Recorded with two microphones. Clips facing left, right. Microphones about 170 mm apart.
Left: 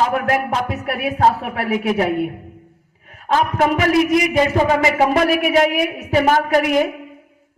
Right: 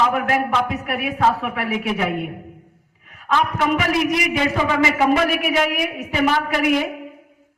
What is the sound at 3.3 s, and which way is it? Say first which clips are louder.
A man's voice: left 3 dB; 40° left (ahead or behind).